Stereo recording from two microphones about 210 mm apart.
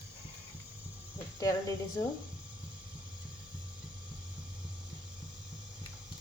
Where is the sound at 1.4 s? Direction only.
15° left (ahead or behind).